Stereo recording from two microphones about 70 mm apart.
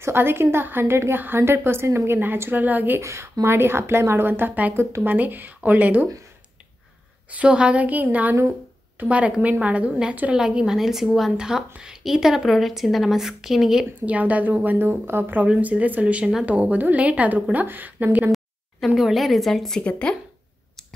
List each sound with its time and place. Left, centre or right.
0.0 s a woman's voice: right
3.0 s a woman's voice: right
7.2 s a woman's voice: centre
14.0 s a woman's voice: right
18.9 s a woman's voice: centre
19.8 s speech: centre